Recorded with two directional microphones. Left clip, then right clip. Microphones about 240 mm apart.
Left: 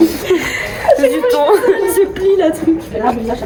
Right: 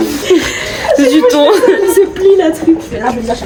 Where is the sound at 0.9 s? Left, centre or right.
Right.